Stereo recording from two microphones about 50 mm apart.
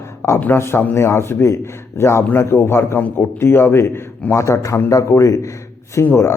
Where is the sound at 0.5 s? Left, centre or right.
Left.